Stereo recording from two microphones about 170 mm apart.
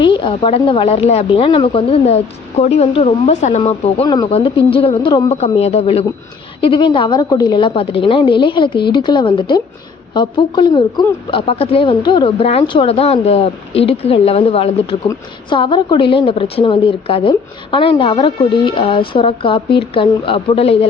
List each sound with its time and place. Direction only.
0.0 s a woman's voice: 30° left (ahead or behind)
5.3 s a woman's voice: 40° left (ahead or behind)